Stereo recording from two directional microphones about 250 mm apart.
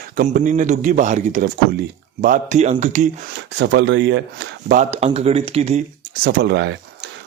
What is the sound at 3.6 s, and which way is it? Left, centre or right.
Speech, right.